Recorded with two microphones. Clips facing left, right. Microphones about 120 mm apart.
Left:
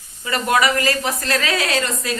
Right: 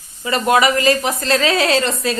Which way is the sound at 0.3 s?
25° right (ahead or behind).